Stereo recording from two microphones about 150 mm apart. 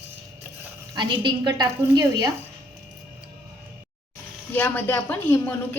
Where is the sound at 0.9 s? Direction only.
30° right (ahead or behind).